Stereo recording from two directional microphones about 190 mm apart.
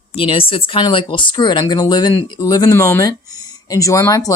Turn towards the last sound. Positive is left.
turn(degrees=20)  # may be behind; listen again after turning